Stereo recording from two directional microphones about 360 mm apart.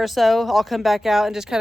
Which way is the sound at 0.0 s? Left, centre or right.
Centre.